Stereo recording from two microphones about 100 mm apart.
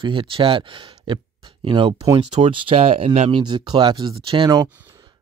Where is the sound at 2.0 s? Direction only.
40° right (ahead or behind).